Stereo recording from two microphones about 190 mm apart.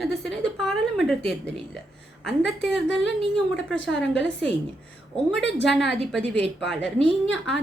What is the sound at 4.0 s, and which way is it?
Speech, 70° left (ahead or behind).